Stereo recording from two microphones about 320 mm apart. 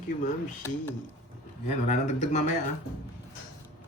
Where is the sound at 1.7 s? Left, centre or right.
Left.